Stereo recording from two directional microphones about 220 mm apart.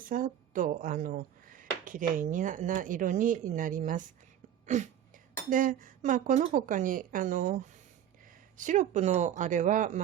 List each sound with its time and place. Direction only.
0.0 s speech: 40° right (ahead or behind)
4.6 s a sound: 35° right (ahead or behind)
5.5 s speech: 35° right (ahead or behind)
8.5 s speech: 35° right (ahead or behind)